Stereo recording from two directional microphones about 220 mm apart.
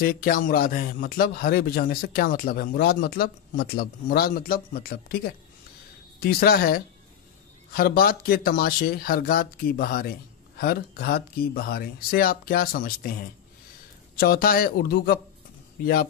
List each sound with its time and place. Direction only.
0.0 s a man's voice: 40° left (ahead or behind)